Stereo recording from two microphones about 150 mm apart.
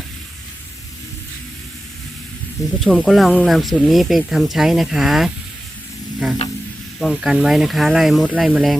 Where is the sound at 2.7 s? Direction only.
5° left (ahead or behind).